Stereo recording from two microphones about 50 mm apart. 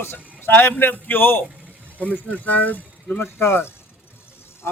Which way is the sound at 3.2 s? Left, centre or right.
Left.